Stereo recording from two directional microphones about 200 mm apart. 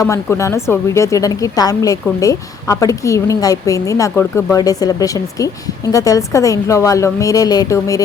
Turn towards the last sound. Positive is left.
turn(degrees=15)  # may be behind; listen again after turning